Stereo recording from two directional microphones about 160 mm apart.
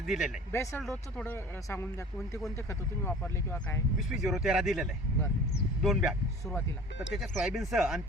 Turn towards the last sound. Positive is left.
turn(degrees=0)  # may be behind; listen again after turning